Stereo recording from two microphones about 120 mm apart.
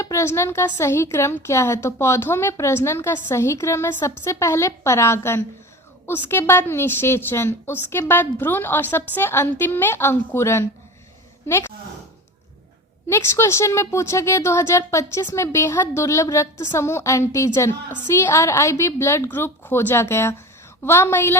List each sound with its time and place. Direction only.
0.0 s a woman's voice: 25° left (ahead or behind)
13.1 s a woman's voice: 25° left (ahead or behind)